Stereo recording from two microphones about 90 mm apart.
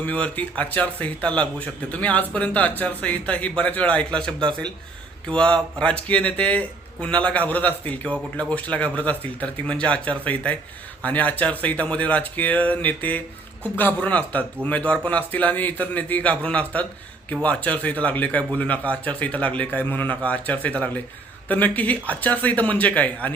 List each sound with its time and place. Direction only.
0.0 s speech: 15° left (ahead or behind)